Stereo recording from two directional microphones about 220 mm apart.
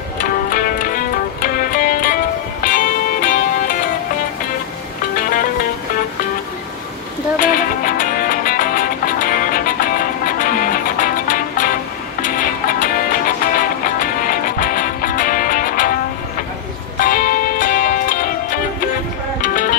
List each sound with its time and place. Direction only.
0.5 s music: 40° left (ahead or behind)
7.3 s music: 40° left (ahead or behind)
17.0 s music: 40° left (ahead or behind)